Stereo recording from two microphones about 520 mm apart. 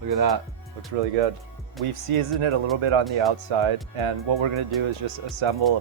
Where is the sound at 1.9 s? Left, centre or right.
Right.